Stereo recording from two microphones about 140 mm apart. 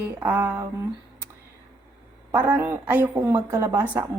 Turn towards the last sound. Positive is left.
turn(degrees=-15)  # may be behind; listen again after turning